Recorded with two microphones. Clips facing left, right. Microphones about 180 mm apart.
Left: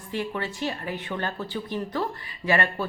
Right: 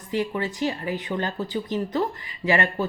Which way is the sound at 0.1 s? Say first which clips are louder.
Right 4 dB; 15° right (ahead or behind).